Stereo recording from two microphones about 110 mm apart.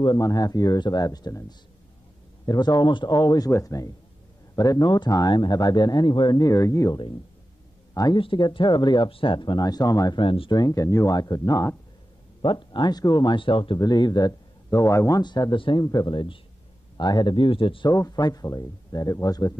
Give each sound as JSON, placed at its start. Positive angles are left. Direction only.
{"t": 0.0, "sound": "speech", "side_deg": 35}
{"t": 2.4, "sound": "speech", "side_deg": 40}
{"t": 8.2, "sound": "speech", "side_deg": 45}
{"t": 10.2, "sound": "speech", "side_deg": 55}
{"t": 10.5, "sound": "speech", "side_deg": 35}
{"t": 12.4, "sound": "speech", "side_deg": 45}
{"t": 13.7, "sound": "speech", "side_deg": 40}
{"t": 17.8, "sound": "speech", "side_deg": 30}